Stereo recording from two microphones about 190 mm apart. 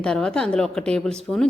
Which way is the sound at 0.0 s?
5° left (ahead or behind).